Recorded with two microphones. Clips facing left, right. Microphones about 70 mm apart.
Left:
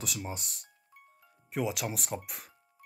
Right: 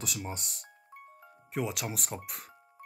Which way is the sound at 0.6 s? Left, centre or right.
Right.